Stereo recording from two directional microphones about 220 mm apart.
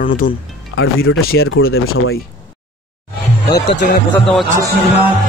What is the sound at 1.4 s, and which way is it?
Speech, 65° left (ahead or behind).